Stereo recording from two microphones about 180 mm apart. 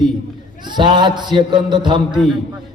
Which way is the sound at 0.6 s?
25° right (ahead or behind).